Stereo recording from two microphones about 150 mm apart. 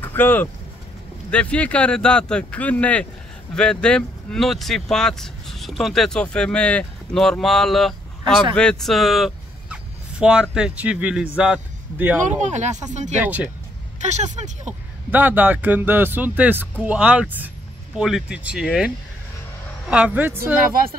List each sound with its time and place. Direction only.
0.0 s speech: 15° left (ahead or behind)
8.5 s a sound: 5° left (ahead or behind)
10.5 s speech: 5° right (ahead or behind)
12.4 s speech: 50° right (ahead or behind)
13.2 s speech: 10° right (ahead or behind)
13.9 s speech: 50° right (ahead or behind)
15.0 s speech: 10° right (ahead or behind)
19.9 s speech: 10° right (ahead or behind)